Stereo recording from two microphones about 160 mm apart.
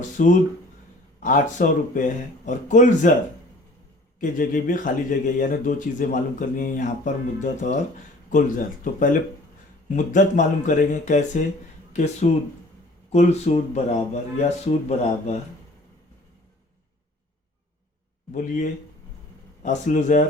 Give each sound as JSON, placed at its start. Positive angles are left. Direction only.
{"t": 0.2, "sound": "speech", "side_deg": 55}
{"t": 4.2, "sound": "speech", "side_deg": 55}
{"t": 18.3, "sound": "speech", "side_deg": 50}